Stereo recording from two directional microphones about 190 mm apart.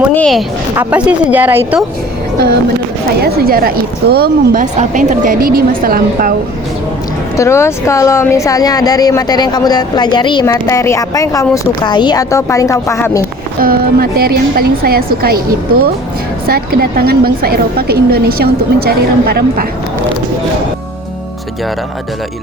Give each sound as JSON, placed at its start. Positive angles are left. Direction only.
{"t": 0.1, "sound": "speech", "side_deg": 5}
{"t": 0.8, "sound": "speech", "side_deg": -5}
{"t": 3.2, "sound": "a woman's voice", "side_deg": -55}
{"t": 4.6, "sound": "a woman's voice", "side_deg": -40}
{"t": 7.3, "sound": "a woman's voice", "side_deg": 15}
{"t": 13.6, "sound": "a woman's voice", "side_deg": -50}
{"t": 16.5, "sound": "a woman's voice", "side_deg": -55}